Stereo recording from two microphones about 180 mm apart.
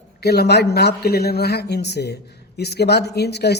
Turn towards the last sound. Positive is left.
turn(degrees=65)  # may be behind; listen again after turning